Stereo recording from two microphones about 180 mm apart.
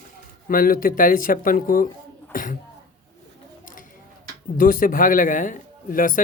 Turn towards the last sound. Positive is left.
turn(degrees=50)  # may be behind; listen again after turning